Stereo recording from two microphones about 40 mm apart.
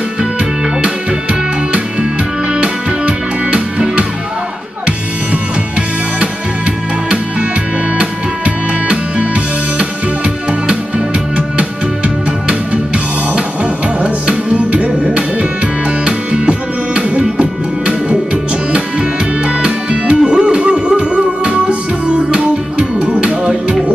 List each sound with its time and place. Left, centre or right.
2.5 s music: right
4.8 s music: right
8.5 s music: right
13.9 s music: right